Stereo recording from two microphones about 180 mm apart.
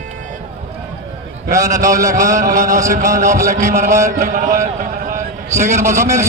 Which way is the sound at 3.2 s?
40° right (ahead or behind).